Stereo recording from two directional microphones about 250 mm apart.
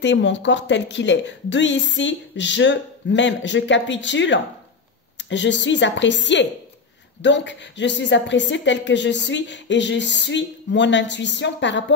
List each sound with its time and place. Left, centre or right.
0.0 s a woman's voice: left